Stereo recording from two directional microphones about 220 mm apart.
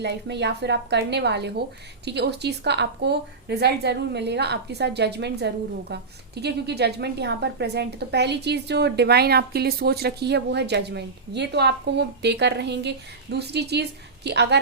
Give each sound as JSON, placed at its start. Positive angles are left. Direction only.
{"t": 0.0, "sound": "a woman's voice", "side_deg": -50}